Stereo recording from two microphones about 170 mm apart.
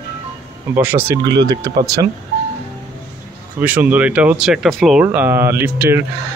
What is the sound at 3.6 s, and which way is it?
Speech, 10° right (ahead or behind).